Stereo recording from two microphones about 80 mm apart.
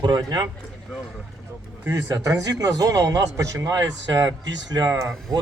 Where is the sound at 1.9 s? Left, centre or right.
Right.